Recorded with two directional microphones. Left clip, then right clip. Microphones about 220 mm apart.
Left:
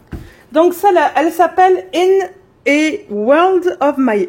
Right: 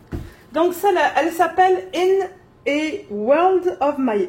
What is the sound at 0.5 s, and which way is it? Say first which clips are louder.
A woman's voice: left 7 dB; 55° left (ahead or behind).